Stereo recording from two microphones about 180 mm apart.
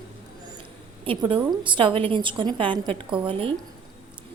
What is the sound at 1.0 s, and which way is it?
A woman's voice, 30° right (ahead or behind).